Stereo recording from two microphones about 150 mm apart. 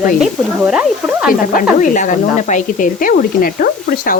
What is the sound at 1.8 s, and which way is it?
Speech, 60° left (ahead or behind).